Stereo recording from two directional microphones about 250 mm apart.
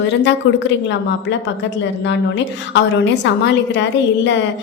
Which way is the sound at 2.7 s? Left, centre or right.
Left.